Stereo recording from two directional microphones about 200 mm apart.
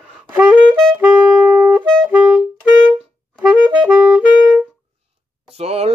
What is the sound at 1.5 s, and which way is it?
Music, 10° right (ahead or behind).